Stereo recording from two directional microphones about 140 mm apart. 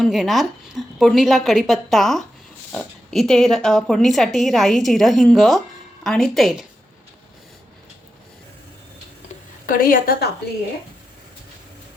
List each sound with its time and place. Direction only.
0.0 s speech: centre (ahead or behind)
9.6 s a woman's voice: 90° left